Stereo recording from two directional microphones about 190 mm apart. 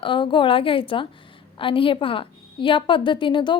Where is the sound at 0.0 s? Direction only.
25° left (ahead or behind).